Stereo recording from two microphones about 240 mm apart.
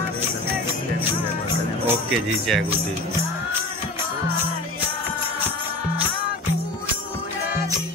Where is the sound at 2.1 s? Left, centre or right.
Centre.